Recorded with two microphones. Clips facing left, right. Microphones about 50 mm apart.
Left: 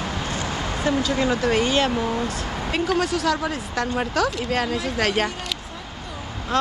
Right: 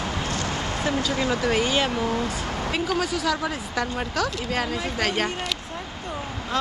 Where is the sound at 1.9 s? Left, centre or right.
Centre.